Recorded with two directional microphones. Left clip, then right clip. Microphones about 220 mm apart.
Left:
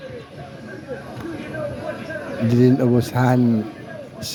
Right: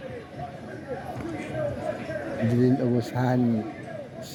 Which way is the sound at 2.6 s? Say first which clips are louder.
Left 8 dB; 15° left (ahead or behind).